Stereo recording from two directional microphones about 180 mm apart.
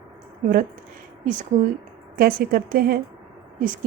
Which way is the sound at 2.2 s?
55° right (ahead or behind).